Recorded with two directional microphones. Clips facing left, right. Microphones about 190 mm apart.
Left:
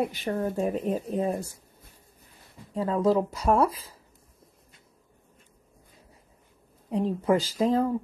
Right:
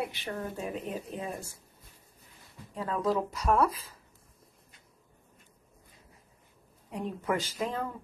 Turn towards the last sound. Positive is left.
turn(degrees=35)  # may be behind; listen again after turning